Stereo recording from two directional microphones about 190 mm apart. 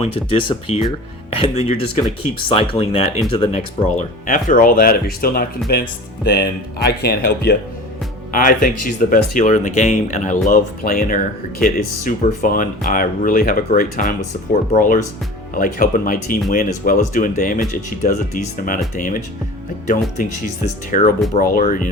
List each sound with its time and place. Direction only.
0.0 s speech: 30° left (ahead or behind)
4.3 s speech: 45° left (ahead or behind)
8.3 s speech: 45° left (ahead or behind)